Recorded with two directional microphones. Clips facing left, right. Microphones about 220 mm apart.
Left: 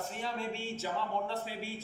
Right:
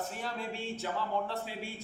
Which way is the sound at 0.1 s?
Centre (ahead or behind).